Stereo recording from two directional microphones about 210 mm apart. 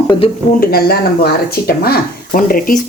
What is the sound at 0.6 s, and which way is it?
Speech, 45° left (ahead or behind).